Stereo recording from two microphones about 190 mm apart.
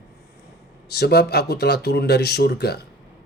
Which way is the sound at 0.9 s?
55° left (ahead or behind).